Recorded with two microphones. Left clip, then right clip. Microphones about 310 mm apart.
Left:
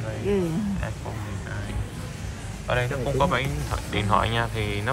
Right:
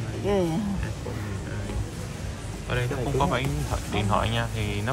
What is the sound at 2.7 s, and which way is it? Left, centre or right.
Speech, centre.